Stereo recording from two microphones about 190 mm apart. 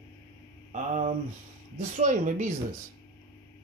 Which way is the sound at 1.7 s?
40° right (ahead or behind).